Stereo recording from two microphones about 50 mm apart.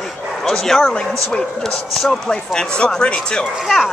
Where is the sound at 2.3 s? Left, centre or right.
Centre.